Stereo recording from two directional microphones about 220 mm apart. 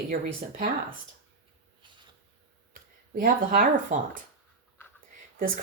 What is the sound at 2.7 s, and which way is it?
Speech, 40° right (ahead or behind).